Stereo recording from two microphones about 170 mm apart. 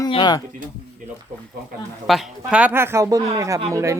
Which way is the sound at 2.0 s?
Centre (ahead or behind).